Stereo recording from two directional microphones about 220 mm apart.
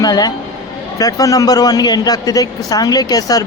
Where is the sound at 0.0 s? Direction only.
15° left (ahead or behind).